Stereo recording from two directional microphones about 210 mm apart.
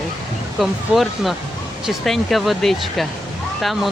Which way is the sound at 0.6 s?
Centre (ahead or behind).